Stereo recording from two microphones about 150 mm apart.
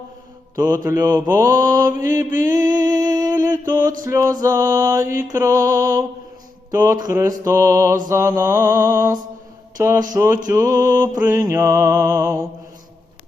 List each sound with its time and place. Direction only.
0.7 s music: 25° right (ahead or behind)
9.7 s mantra: 20° right (ahead or behind)
10.2 s a sound: 15° right (ahead or behind)
10.5 s music: 20° right (ahead or behind)